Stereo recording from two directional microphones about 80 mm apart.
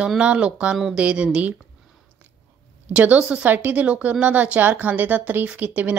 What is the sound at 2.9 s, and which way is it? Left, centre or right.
A woman's voice, centre.